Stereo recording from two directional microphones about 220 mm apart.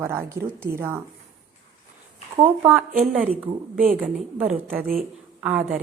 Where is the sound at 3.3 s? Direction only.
40° right (ahead or behind).